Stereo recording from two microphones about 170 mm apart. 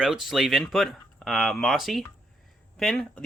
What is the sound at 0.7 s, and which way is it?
Speech, centre (ahead or behind).